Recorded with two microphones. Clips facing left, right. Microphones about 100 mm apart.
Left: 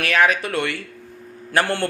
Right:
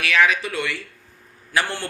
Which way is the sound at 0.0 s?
45° left (ahead or behind).